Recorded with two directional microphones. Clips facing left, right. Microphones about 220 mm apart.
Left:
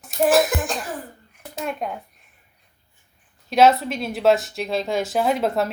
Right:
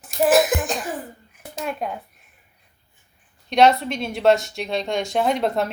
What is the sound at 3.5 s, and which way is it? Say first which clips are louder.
A woman's voice: even; 5° left (ahead or behind).